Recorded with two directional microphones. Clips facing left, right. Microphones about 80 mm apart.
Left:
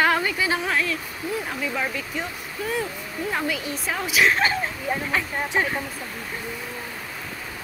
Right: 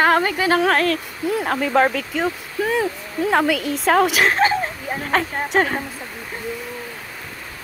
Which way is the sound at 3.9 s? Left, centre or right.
Right.